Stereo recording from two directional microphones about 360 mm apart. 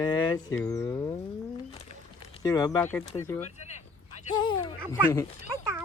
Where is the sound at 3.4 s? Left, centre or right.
Centre.